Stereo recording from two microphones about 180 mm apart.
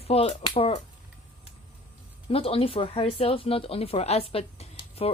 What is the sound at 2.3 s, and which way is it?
Speech, 30° left (ahead or behind).